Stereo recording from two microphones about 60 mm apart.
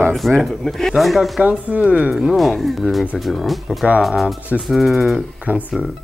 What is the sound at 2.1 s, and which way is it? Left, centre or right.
Speech, centre.